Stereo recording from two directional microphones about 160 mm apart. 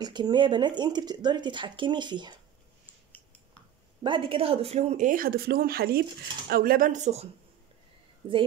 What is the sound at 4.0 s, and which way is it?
Speech, 30° right (ahead or behind).